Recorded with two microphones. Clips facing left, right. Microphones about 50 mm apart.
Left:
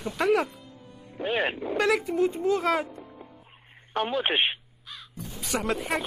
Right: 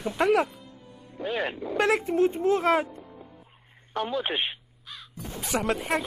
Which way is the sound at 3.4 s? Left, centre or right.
Left.